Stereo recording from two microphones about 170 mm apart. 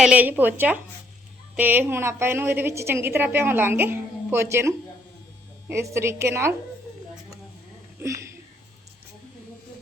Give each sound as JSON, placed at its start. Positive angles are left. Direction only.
{"t": 0.0, "sound": "a woman's voice", "side_deg": -5}
{"t": 8.0, "sound": "speech", "side_deg": -15}